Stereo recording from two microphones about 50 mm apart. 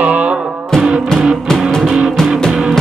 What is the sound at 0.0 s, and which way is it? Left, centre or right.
Music, right.